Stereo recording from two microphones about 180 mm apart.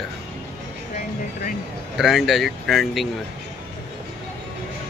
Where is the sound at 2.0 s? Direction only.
Centre (ahead or behind).